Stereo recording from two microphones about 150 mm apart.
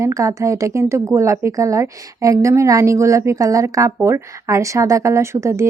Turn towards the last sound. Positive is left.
turn(degrees=-20)  # may be behind; listen again after turning